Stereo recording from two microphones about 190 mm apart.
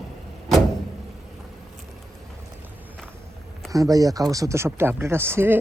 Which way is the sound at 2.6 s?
10° right (ahead or behind).